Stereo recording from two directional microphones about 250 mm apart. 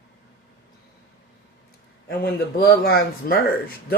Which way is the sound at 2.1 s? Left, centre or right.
Left.